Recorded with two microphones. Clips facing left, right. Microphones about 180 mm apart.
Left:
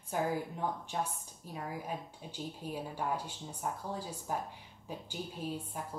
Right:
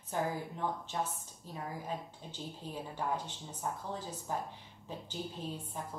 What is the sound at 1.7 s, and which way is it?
Speech, 10° left (ahead or behind).